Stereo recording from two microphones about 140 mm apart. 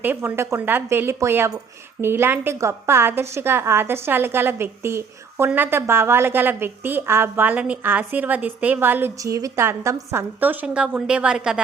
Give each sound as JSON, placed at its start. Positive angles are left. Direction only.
{"t": 0.0, "sound": "a woman's voice", "side_deg": -15}